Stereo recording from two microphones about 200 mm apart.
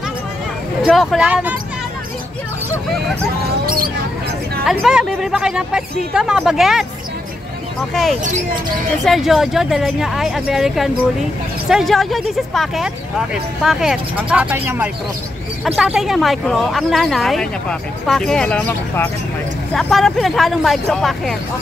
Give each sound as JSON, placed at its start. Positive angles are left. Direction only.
{"t": 0.8, "sound": "speech", "side_deg": -5}
{"t": 3.6, "sound": "mouse", "side_deg": -45}
{"t": 4.6, "sound": "speech", "side_deg": 0}
{"t": 7.9, "sound": "speech", "side_deg": 0}